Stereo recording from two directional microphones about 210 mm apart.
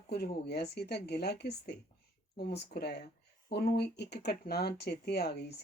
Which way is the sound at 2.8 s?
50° left (ahead or behind).